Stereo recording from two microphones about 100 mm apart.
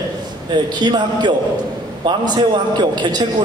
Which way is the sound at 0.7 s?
45° right (ahead or behind).